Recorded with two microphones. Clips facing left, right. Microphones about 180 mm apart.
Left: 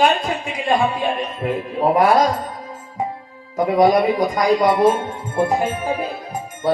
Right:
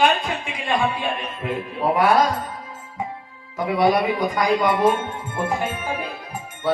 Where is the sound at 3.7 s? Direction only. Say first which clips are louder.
Left 4 dB; 40° left (ahead or behind).